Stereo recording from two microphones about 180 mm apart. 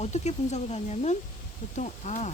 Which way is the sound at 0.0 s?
40° left (ahead or behind).